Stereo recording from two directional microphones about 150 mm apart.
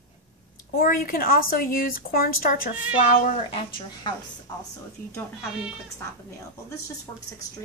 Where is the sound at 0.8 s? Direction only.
75° left (ahead or behind); by 3.4 s 55° left (ahead or behind).